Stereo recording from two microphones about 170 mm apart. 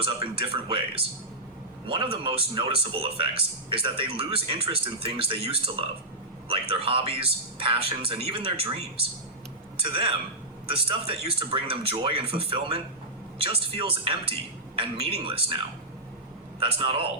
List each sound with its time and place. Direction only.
0.0 s speech: 30° right (ahead or behind)
16.6 s speech: 30° right (ahead or behind)